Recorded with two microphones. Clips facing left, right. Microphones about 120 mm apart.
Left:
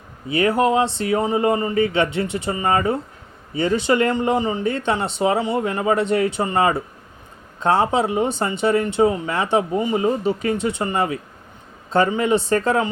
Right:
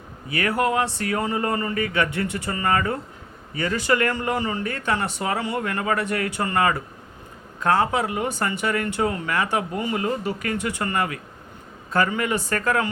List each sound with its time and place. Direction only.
0.3 s speech: 25° left (ahead or behind)